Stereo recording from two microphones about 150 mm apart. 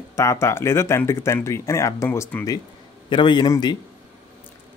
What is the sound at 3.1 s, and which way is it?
Speech, 30° left (ahead or behind).